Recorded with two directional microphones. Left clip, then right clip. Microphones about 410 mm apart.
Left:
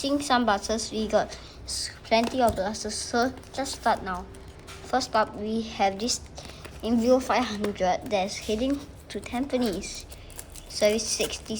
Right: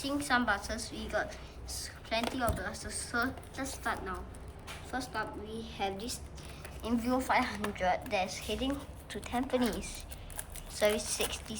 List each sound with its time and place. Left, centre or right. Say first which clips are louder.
0.0 s a woman's voice: left 7 dB; centre